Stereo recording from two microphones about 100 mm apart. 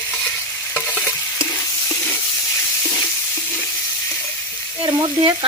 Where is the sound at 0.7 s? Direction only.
15° left (ahead or behind).